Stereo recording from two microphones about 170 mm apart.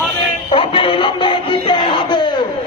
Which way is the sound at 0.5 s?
30° left (ahead or behind).